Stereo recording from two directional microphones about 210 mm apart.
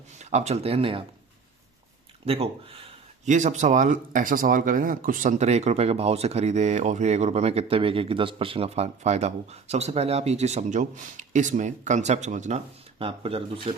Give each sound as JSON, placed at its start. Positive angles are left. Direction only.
{"t": 0.2, "sound": "speech", "side_deg": -30}
{"t": 2.2, "sound": "speech", "side_deg": -25}